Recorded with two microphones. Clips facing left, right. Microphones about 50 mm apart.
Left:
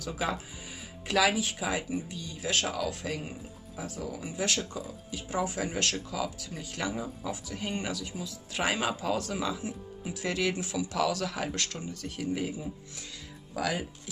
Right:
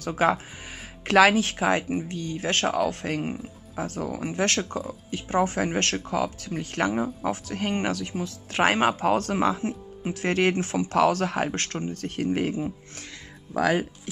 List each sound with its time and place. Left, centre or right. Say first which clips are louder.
0.0 s speech: right 9 dB; right